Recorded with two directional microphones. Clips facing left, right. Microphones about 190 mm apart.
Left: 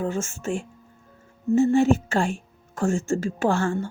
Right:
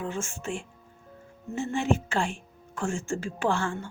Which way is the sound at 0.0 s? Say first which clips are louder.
Left 6 dB; 40° left (ahead or behind).